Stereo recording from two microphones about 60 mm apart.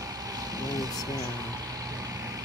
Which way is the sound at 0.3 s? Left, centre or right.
Right.